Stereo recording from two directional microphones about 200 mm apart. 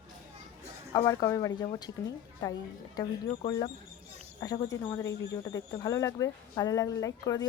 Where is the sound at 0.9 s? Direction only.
20° left (ahead or behind).